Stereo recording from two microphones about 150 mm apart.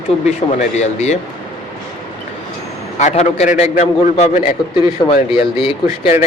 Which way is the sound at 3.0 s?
50° left (ahead or behind).